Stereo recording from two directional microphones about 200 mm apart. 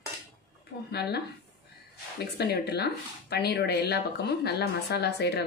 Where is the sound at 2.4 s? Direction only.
55° left (ahead or behind).